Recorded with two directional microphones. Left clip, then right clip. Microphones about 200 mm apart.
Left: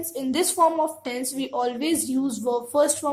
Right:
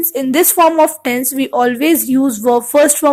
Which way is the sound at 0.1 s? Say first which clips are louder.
Right 11 dB; 25° right (ahead or behind).